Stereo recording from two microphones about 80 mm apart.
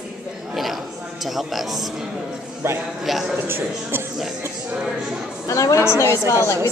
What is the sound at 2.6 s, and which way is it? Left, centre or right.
Speech, right.